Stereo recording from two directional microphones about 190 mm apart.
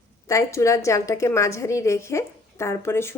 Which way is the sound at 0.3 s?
15° left (ahead or behind).